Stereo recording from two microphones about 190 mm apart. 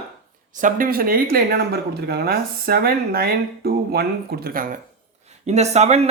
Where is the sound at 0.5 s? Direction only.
45° right (ahead or behind).